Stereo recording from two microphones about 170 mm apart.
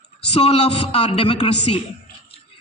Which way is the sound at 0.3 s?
35° left (ahead or behind).